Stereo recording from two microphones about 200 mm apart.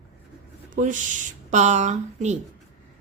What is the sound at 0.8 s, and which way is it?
A woman's voice, 40° right (ahead or behind).